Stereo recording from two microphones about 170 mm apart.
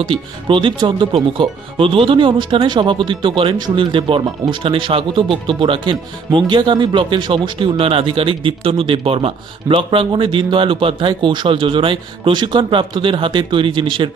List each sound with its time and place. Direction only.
0.0 s speech: 30° right (ahead or behind)